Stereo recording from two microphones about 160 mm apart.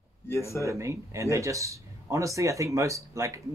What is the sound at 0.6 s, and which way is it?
Speech, 20° right (ahead or behind).